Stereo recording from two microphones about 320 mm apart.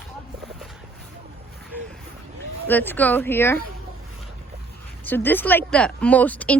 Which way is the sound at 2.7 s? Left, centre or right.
Centre.